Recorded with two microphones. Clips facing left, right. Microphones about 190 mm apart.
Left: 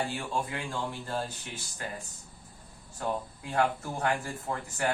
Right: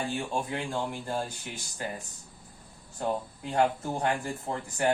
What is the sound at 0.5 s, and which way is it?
Speech, 15° right (ahead or behind).